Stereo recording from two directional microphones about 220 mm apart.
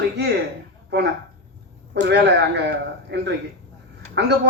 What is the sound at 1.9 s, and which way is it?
A man's voice, 50° right (ahead or behind).